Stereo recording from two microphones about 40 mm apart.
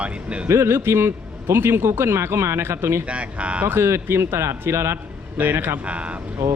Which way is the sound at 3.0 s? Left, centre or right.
Right.